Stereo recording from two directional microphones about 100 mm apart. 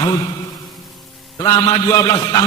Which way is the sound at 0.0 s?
45° left (ahead or behind).